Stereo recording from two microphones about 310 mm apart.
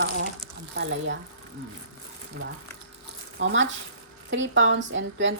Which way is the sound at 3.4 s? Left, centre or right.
Right.